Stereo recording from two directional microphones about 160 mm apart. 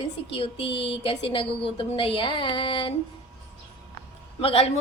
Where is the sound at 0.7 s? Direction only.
90° left.